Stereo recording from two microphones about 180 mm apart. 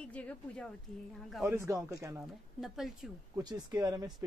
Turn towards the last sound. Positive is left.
turn(degrees=-20)  # may be behind; listen again after turning